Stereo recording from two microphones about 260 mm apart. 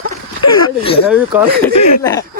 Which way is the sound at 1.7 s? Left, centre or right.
Left.